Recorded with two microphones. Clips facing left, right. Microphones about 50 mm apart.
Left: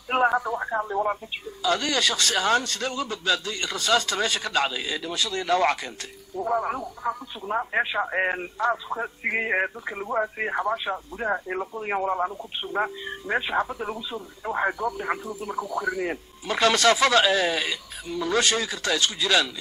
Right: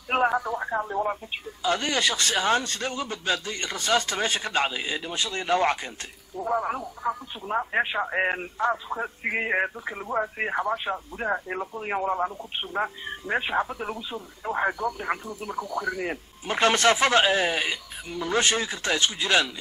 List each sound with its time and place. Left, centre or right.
0.1 s a sound: centre
1.6 s a man's voice: right
6.3 s speech: centre
16.4 s a man's voice: right